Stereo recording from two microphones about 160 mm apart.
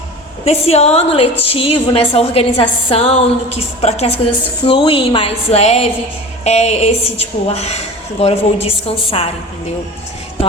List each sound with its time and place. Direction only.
0.4 s a woman's voice: 40° left (ahead or behind)